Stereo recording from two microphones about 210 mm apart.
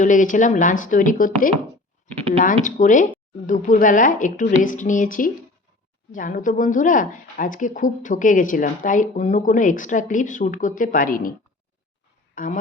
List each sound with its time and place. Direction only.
0.0 s speech: 40° left (ahead or behind)
2.6 s speech: 35° left (ahead or behind)